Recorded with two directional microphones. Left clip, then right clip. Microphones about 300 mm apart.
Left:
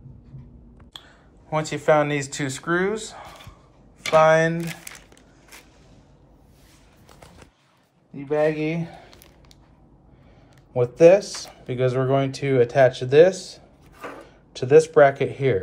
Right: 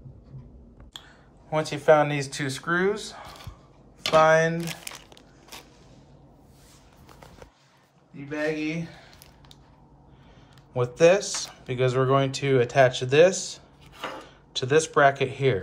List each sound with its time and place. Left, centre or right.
0.9 s speech: centre
4.6 s crumpling: right
8.3 s speech: centre
10.7 s speech: centre